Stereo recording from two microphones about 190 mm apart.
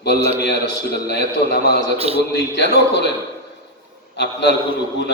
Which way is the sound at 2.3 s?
60° left (ahead or behind).